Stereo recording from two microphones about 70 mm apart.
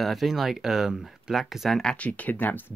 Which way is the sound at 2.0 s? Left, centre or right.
Left.